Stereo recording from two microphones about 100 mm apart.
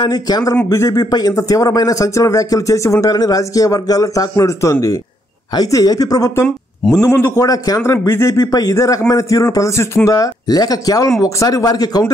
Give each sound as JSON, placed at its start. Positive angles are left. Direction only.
{"t": 0.1, "sound": "a man's voice", "side_deg": 40}